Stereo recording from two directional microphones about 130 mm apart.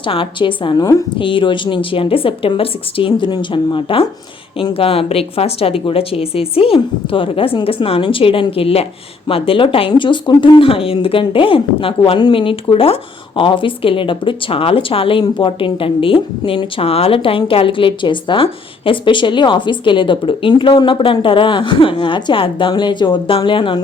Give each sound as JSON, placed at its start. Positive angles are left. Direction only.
{"t": 0.0, "sound": "a woman's voice", "side_deg": 40}